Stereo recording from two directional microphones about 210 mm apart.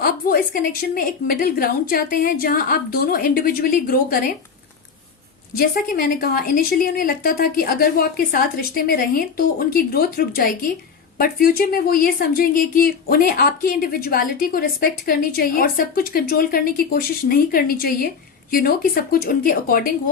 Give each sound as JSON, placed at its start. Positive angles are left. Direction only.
{"t": 0.0, "sound": "a woman's voice", "side_deg": 45}
{"t": 5.5, "sound": "a woman's voice", "side_deg": 45}